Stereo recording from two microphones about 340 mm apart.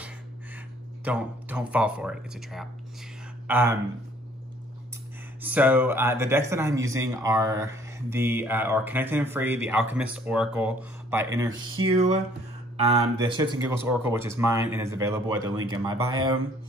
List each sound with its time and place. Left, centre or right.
1.0 s speech: centre
5.4 s a man's voice: centre